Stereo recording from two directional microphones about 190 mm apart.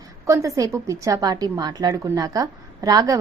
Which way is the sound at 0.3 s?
15° right (ahead or behind).